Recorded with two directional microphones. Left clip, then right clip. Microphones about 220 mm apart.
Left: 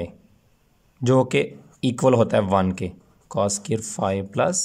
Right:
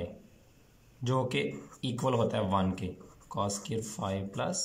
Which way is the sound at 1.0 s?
45° left (ahead or behind).